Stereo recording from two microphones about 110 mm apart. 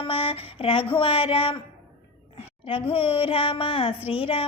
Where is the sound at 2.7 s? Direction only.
60° left (ahead or behind).